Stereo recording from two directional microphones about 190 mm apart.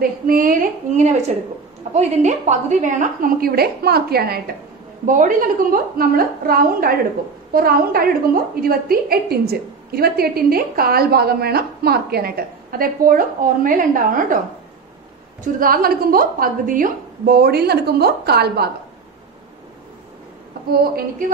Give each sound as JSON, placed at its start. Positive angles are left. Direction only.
{"t": 0.0, "sound": "a woman's voice", "side_deg": -50}
{"t": 5.0, "sound": "a woman's voice", "side_deg": -45}
{"t": 15.4, "sound": "a woman's voice", "side_deg": -50}
{"t": 20.5, "sound": "a woman's voice", "side_deg": -55}